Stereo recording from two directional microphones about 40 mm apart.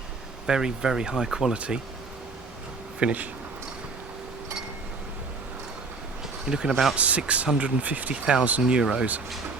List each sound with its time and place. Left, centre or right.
0.4 s speech: centre
1.5 s speech: right
3.0 s speech: right
6.5 s speech: centre
6.9 s speech: right
8.1 s speech: right